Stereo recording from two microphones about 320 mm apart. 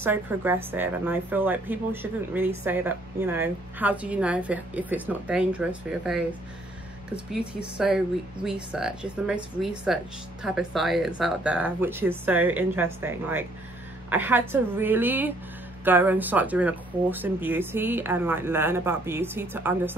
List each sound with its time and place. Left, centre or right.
0.0 s a woman's voice: centre